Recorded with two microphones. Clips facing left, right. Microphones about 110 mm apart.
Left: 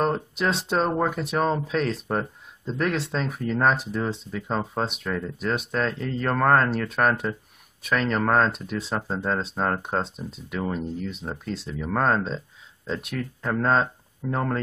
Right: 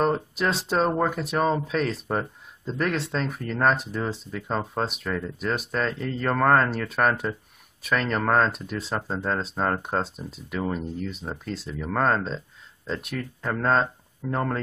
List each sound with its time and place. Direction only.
0.0 s speech: centre (ahead or behind)